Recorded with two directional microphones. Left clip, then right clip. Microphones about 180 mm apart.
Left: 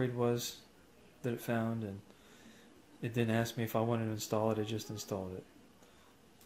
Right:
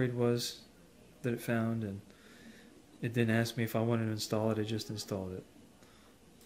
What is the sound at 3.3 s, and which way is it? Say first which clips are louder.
Speech: right 1 dB; 40° right (ahead or behind).